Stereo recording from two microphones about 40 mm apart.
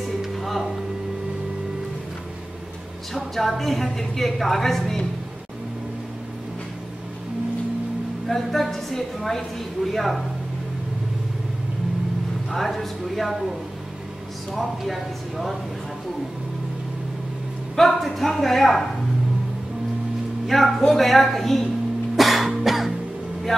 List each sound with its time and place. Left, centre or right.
0.2 s music: centre
3.1 s a woman's voice: centre
8.3 s a woman's voice: centre
12.4 s a man's voice: centre
14.6 s a woman's voice: centre
17.7 s a woman's voice: centre
20.4 s a woman's voice: centre
22.1 s cough: centre
22.5 s music: centre